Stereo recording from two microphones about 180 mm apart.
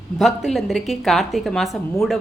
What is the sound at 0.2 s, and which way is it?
A woman's voice, centre (ahead or behind).